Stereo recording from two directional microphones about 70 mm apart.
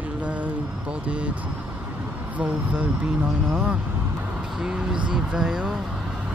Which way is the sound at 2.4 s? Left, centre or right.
Centre.